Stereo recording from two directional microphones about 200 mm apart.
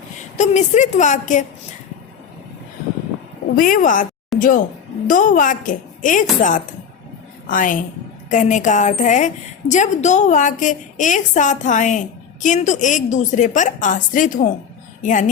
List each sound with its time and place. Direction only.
0.3 s a woman's voice: 35° left (ahead or behind)
3.5 s a woman's voice: 45° left (ahead or behind)
7.4 s a woman's voice: 40° left (ahead or behind)